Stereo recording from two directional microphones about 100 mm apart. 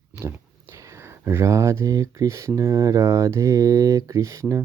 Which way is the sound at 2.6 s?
35° right (ahead or behind).